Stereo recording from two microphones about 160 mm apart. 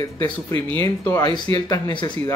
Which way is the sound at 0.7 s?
20° left (ahead or behind).